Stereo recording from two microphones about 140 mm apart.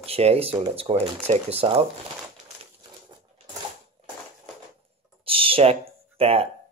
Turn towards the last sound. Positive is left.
turn(degrees=-45)  # may be behind; listen again after turning